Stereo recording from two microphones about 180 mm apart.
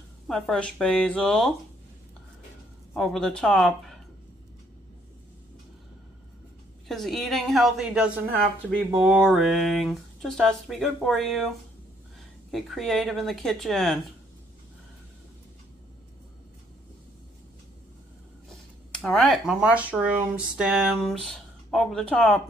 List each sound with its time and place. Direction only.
0.3 s speech: 5° left (ahead or behind)
2.9 s speech: 5° left (ahead or behind)
6.9 s speech: centre (ahead or behind)
18.5 s speech: centre (ahead or behind)